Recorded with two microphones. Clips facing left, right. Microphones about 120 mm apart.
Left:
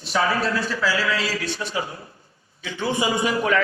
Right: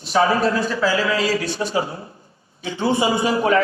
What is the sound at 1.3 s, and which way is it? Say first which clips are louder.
A man's voice: right 6 dB; 35° right (ahead or behind).